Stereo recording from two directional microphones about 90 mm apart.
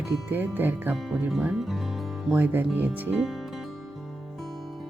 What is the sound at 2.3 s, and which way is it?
Speech, 20° right (ahead or behind).